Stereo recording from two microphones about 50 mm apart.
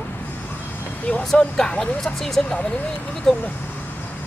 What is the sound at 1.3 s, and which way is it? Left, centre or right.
Speech, centre.